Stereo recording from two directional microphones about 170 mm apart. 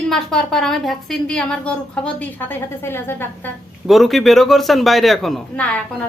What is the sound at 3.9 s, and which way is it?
A woman's voice, centre (ahead or behind).